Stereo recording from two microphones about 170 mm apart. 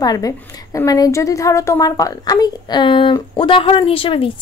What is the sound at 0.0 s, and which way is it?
A woman's voice, 20° left (ahead or behind).